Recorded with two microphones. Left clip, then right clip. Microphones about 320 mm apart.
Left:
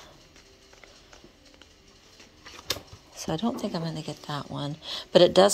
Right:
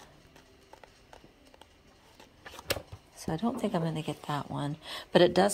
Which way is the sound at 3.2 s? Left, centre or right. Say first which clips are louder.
Left 3 dB; centre.